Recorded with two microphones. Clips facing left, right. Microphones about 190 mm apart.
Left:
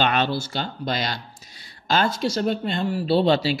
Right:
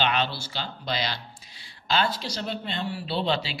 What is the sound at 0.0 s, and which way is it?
Speech, 50° left (ahead or behind).